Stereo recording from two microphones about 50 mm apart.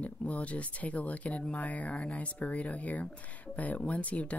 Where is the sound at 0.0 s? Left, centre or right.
Left.